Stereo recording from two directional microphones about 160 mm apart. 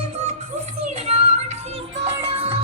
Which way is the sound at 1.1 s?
40° right (ahead or behind).